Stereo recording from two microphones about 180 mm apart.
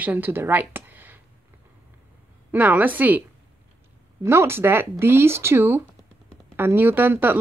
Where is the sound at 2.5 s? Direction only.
10° right (ahead or behind).